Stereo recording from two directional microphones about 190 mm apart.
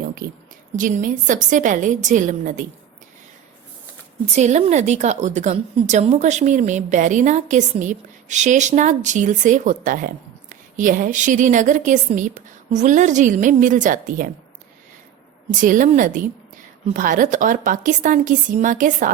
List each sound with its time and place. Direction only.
0.0 s a sound: 50° right (ahead or behind)
0.8 s a woman's voice: 45° right (ahead or behind)
4.4 s a woman's voice: 35° right (ahead or behind)
15.4 s a woman's voice: 45° right (ahead or behind)